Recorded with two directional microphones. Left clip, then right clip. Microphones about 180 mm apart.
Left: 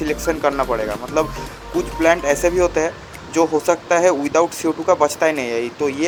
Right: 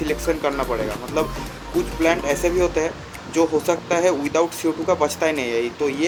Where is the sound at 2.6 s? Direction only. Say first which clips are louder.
Left 3 dB; 30° left (ahead or behind).